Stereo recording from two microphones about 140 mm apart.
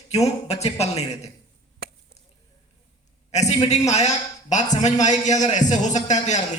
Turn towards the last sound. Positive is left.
turn(degrees=55)  # may be behind; listen again after turning